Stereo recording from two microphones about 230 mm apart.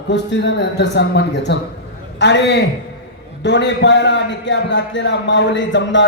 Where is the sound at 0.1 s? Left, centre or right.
Left.